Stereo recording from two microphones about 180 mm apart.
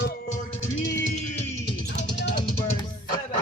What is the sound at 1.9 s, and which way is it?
Music, 75° left (ahead or behind).